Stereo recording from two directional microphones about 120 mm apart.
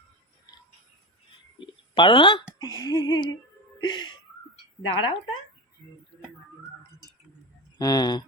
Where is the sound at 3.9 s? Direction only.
35° left (ahead or behind).